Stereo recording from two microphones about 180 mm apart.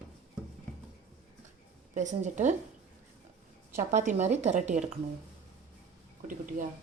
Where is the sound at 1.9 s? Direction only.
45° right (ahead or behind).